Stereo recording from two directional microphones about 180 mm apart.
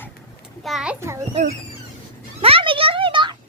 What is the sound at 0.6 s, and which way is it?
Speech, centre (ahead or behind).